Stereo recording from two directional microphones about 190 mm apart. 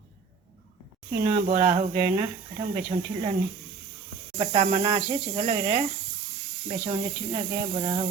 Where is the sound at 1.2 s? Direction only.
30° right (ahead or behind).